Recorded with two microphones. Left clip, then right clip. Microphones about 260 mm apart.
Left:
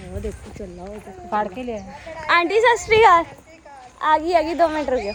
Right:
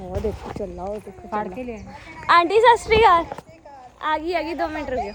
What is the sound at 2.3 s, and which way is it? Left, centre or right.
A woman's voice, centre.